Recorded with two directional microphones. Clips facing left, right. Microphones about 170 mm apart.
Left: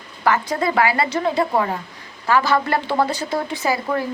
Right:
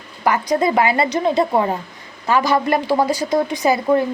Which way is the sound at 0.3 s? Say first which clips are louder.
Right 3 dB; 20° right (ahead or behind).